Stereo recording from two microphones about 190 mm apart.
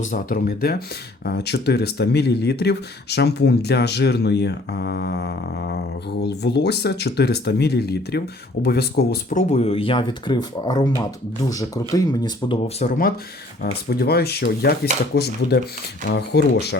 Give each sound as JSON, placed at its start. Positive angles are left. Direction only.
{"t": 0.0, "sound": "speech", "side_deg": 45}
{"t": 9.3, "sound": "speech", "side_deg": 35}
{"t": 12.6, "sound": "speech", "side_deg": 45}
{"t": 13.6, "sound": "speech", "side_deg": 55}